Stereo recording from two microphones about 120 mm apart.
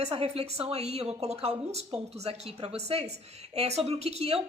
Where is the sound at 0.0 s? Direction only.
55° right (ahead or behind).